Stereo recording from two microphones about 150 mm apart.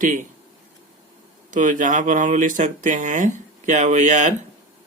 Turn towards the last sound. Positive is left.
turn(degrees=-55)  # may be behind; listen again after turning